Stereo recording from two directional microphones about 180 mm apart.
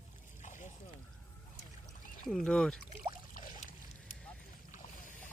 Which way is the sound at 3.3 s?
50° left (ahead or behind).